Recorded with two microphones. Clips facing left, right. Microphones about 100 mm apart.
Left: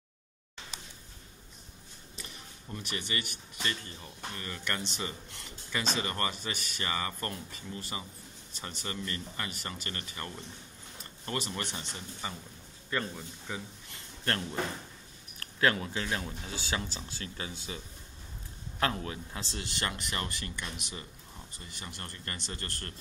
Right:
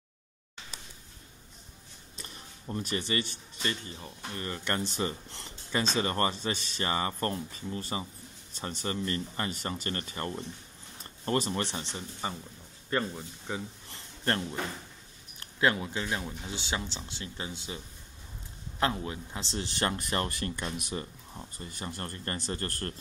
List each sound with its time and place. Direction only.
2.2 s speech: 35° right (ahead or behind)
13.5 s a sound: 25° right (ahead or behind)
15.3 s speech: 20° right (ahead or behind)
18.8 s speech: 20° right (ahead or behind); by 22.9 s 35° right (ahead or behind)